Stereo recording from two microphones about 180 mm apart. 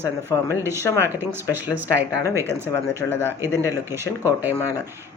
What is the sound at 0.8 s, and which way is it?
Speech, 15° left (ahead or behind).